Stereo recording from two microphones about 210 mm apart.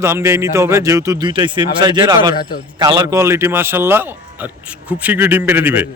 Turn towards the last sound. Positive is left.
turn(degrees=-10)  # may be behind; listen again after turning